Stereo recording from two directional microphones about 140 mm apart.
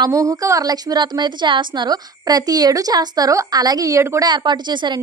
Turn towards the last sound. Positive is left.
turn(degrees=-30)  # may be behind; listen again after turning